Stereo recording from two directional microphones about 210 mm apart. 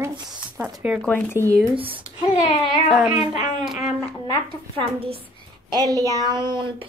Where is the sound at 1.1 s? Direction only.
10° left (ahead or behind).